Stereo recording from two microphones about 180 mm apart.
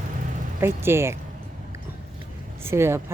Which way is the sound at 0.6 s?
15° right (ahead or behind).